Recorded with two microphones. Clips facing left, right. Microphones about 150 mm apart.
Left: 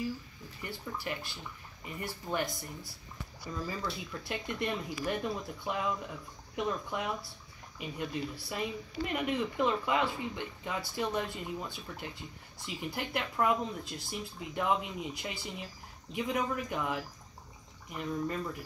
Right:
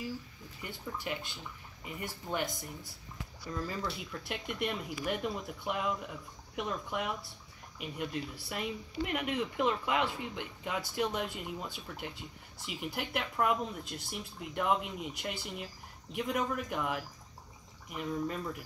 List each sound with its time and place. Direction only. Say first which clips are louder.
0.6 s speech: left 1 dB; 15° right (ahead or behind)
3.6 s speech: left 2 dB; centre (ahead or behind)